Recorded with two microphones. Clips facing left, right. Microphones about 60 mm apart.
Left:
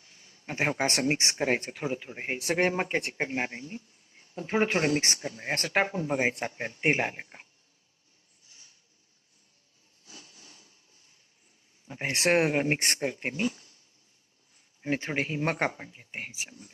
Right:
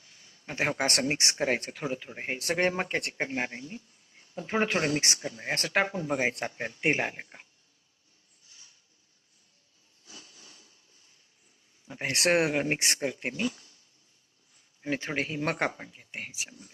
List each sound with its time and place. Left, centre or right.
0.0 s a sound: left
1.1 s a man's voice: left
2.1 s a man's voice: centre
4.2 s speech: centre
4.7 s a man's voice: left; by 7.4 s centre
10.3 s a sound: left
11.9 s a man's voice: left
12.8 s speech: left
13.2 s speech: left
14.8 s a man's voice: left